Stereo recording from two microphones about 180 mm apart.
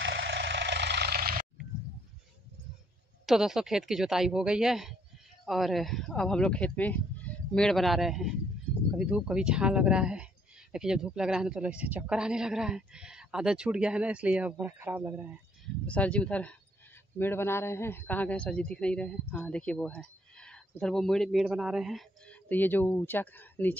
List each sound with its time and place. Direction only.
0.0 s vehicle: 75° right (ahead or behind)
3.3 s a man's voice: centre (ahead or behind)
15.9 s a man's voice: 5° left (ahead or behind)
22.5 s speech: 10° left (ahead or behind)